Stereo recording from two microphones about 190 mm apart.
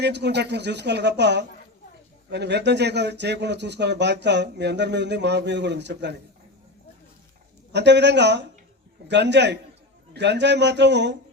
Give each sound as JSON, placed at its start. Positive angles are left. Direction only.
{"t": 0.0, "sound": "speech", "side_deg": -65}
{"t": 7.7, "sound": "speech", "side_deg": -65}